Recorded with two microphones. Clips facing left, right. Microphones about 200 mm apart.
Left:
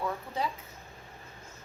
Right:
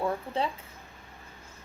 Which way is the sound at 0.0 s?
30° right (ahead or behind).